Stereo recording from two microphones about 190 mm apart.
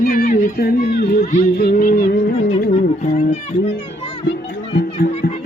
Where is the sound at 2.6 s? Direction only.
45° left (ahead or behind).